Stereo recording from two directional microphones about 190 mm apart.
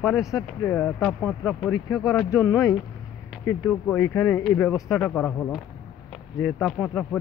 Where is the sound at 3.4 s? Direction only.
10° left (ahead or behind).